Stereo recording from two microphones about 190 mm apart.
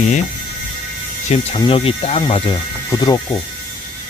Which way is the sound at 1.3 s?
30° left (ahead or behind).